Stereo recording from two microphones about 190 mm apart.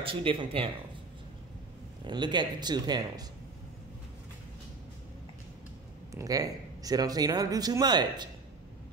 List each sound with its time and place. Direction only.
0.0 s speech: 30° right (ahead or behind)
2.0 s speech: 25° right (ahead or behind)
6.1 s speech: 20° right (ahead or behind)